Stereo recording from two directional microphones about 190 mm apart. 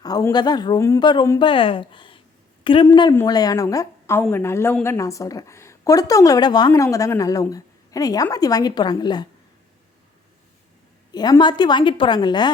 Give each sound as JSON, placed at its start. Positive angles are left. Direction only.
{"t": 0.0, "sound": "a woman's voice", "side_deg": 20}
{"t": 11.1, "sound": "speech", "side_deg": 20}